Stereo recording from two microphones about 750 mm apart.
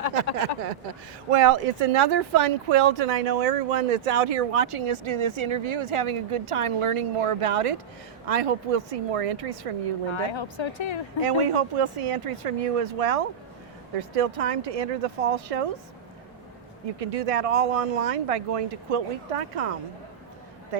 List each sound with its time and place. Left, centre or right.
0.3 s a sound: right
1.3 s a woman's voice: right
10.1 s speech: left
11.2 s speech: right
17.0 s speech: right